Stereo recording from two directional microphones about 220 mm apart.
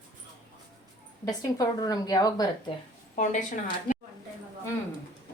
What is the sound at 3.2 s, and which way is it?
Speech, 35° left (ahead or behind).